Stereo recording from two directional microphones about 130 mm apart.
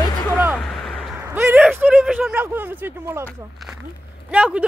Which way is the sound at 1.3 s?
15° right (ahead or behind).